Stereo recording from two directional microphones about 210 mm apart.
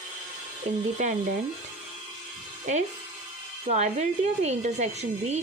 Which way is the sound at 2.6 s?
35° right (ahead or behind).